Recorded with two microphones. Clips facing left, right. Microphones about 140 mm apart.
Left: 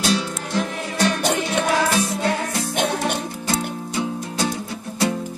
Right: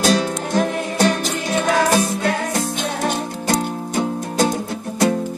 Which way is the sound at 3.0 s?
50° right (ahead or behind).